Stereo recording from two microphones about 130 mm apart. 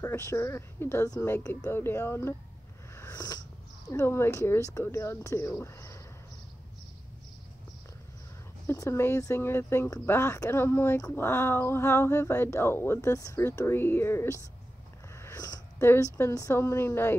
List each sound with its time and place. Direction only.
0.0 s speech: 20° left (ahead or behind)
2.9 s a sound: 20° left (ahead or behind)
3.9 s speech: 20° left (ahead or behind)
8.6 s speech: 20° left (ahead or behind)
15.1 s a sound: 25° left (ahead or behind)
15.8 s speech: 20° left (ahead or behind)